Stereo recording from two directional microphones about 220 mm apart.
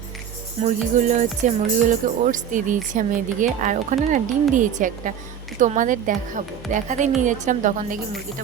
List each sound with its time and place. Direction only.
0.6 s speech: 35° right (ahead or behind)